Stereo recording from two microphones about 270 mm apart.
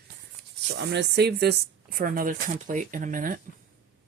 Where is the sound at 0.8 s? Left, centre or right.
Right.